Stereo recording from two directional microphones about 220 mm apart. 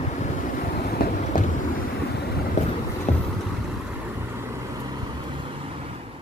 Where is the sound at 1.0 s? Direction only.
40° left (ahead or behind).